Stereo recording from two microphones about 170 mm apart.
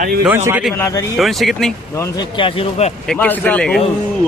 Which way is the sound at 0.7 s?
15° left (ahead or behind).